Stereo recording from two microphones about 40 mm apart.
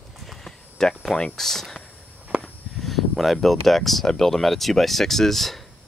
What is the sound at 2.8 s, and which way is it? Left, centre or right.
Speech, centre.